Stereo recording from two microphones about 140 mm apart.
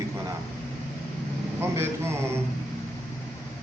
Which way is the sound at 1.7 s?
20° right (ahead or behind).